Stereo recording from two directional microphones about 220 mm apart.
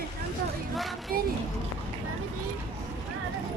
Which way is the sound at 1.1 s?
40° right (ahead or behind).